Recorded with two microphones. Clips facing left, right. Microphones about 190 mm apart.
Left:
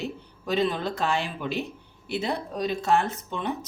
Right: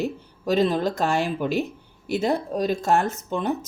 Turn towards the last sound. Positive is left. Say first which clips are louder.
# right 5 dB
turn(degrees=-45)  # may be behind; listen again after turning